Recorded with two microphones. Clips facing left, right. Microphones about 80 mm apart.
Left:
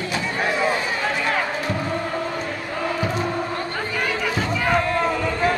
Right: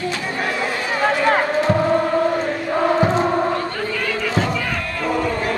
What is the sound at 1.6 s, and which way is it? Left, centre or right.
Chant, right.